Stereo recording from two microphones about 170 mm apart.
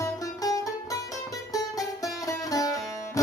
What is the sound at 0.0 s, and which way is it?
Music, 20° left (ahead or behind).